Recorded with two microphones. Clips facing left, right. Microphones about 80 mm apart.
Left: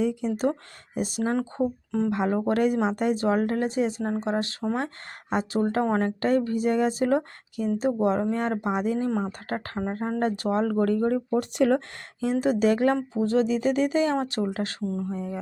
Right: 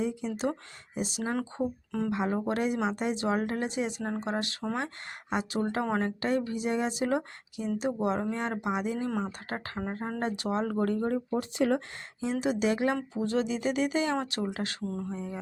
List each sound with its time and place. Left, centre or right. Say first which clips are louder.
0.0 s speech: left 6 dB; left
0.9 s speech: left 6 dB; left
1.4 s speech: left 5 dB; left
2.0 s speech: left 4 dB; left
4.0 s speech: left 5 dB; left
12.2 s speech: left 6 dB; left
15.1 s speech: left 5 dB; left